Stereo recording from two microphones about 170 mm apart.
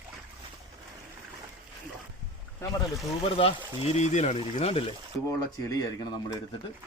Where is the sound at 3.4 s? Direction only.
35° left (ahead or behind).